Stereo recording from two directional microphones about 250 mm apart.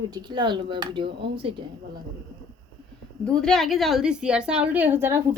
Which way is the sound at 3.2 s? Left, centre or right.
Centre.